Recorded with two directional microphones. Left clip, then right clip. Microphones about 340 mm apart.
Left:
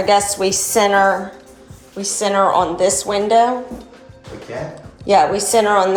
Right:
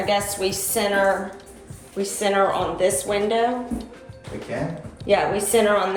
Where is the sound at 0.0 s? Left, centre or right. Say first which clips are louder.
Left 7 dB; centre.